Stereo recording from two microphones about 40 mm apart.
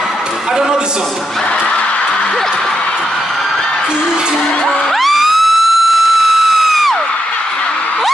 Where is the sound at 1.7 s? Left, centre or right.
Left.